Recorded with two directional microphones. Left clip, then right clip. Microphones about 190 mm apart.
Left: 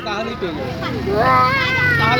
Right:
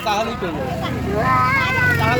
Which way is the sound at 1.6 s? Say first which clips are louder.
Left 2 dB; 50° left (ahead or behind).